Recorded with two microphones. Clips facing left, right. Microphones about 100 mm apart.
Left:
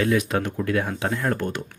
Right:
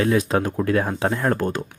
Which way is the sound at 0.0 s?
30° right (ahead or behind).